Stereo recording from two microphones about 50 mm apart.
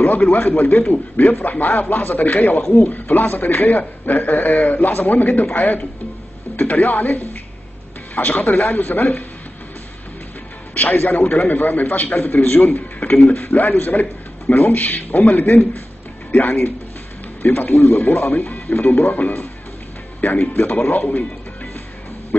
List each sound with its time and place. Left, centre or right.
0.0 s a man's voice: left
10.7 s music: left
11.0 s a man's voice: left